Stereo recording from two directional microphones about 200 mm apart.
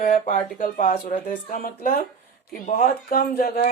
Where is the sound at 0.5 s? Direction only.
45° left (ahead or behind).